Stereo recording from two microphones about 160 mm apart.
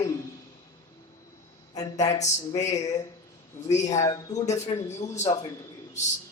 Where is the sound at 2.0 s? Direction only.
45° left (ahead or behind).